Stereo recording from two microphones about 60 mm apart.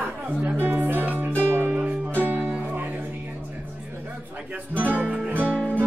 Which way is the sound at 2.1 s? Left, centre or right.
Right.